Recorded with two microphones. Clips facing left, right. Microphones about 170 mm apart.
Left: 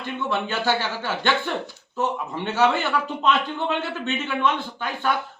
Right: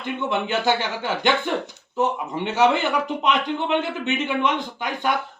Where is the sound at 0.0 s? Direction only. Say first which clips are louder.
Right 2 dB; 20° right (ahead or behind).